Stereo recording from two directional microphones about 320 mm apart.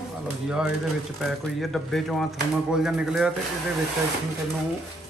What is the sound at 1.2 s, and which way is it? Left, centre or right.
Speech, centre.